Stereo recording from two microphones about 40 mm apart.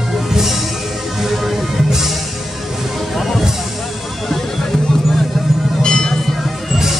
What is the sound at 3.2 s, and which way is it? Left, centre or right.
Music, centre.